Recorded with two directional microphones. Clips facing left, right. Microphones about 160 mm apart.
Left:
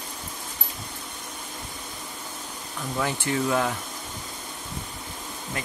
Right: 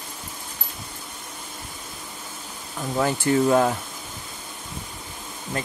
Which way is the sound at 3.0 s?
35° right (ahead or behind).